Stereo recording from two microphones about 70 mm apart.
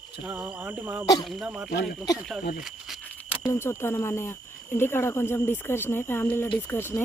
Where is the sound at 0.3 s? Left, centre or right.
Right.